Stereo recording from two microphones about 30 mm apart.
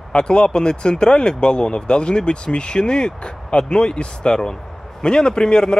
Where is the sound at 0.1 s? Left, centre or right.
Left.